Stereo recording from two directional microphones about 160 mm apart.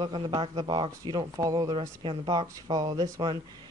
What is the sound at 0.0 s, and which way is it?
Speech, 30° right (ahead or behind).